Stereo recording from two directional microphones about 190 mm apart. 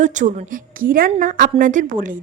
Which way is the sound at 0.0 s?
40° right (ahead or behind).